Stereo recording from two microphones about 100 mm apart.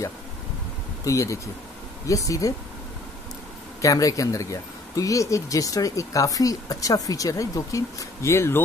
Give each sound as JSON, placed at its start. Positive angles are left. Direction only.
{"t": 1.0, "sound": "speech", "side_deg": 30}
{"t": 3.8, "sound": "speech", "side_deg": 35}